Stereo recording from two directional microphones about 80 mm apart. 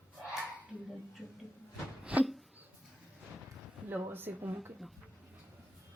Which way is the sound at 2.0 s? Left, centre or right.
Centre.